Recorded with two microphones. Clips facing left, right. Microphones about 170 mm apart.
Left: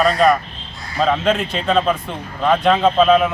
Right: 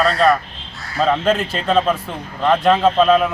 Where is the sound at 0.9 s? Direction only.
Centre (ahead or behind).